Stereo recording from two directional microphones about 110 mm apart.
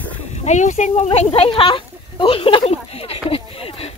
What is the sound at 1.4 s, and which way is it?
Speech, 50° left (ahead or behind).